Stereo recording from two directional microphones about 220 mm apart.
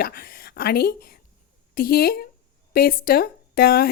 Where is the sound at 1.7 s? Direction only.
45° left (ahead or behind).